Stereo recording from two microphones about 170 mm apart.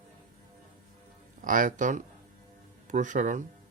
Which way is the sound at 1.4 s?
50° right (ahead or behind).